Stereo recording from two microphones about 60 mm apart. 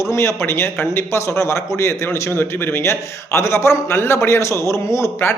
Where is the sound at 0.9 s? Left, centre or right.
Left.